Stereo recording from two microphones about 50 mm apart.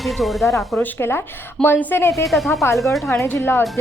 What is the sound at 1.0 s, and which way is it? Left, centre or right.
Speech, left.